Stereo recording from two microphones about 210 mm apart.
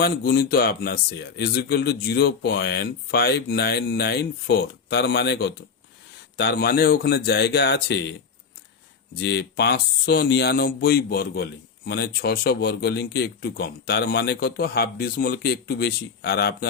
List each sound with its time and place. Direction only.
0.0 s speech: 50° left (ahead or behind)
9.1 s speech: 50° left (ahead or behind)